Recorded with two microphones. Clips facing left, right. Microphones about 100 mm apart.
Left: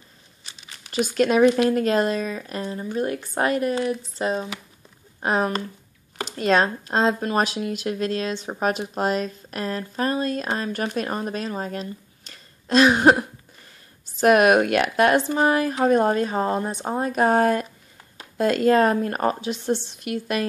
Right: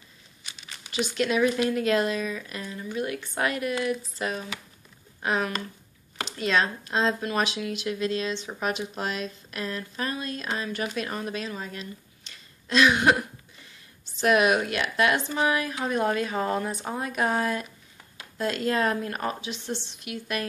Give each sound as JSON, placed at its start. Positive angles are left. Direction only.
{"t": 0.5, "sound": "crumpling", "side_deg": 45}
{"t": 1.6, "sound": "a woman's voice", "side_deg": 40}
{"t": 14.2, "sound": "a woman's voice", "side_deg": 50}